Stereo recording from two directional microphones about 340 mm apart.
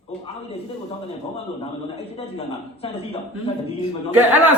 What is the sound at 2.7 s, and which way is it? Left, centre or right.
Speech, centre.